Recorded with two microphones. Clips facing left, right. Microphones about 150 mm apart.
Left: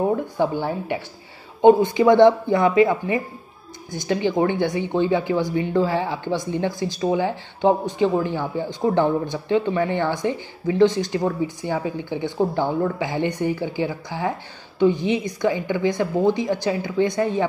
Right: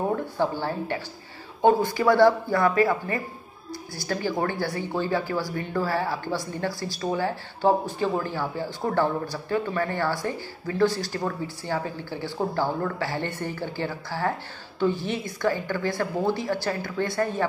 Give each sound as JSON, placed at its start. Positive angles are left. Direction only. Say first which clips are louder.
{"t": 0.1, "sound": "a woman's voice", "louder": "left 4 dB", "side_deg": 20}